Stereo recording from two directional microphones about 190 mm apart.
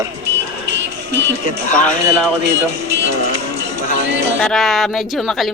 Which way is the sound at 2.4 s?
70° right (ahead or behind).